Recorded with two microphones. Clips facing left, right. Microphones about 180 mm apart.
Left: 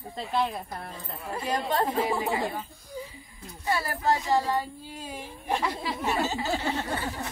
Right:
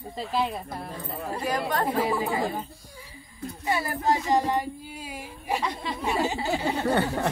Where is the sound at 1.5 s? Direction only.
25° left (ahead or behind).